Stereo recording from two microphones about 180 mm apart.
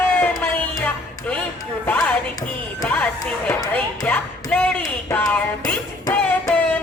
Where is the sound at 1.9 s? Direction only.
5° left (ahead or behind).